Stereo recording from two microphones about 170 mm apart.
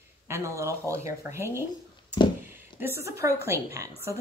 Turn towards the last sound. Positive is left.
turn(degrees=-15)  # may be behind; listen again after turning